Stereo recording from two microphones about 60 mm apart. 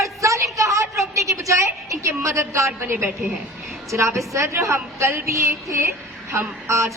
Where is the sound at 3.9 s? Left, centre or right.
Right.